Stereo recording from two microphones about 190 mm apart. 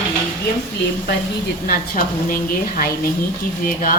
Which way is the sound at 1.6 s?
50° left (ahead or behind).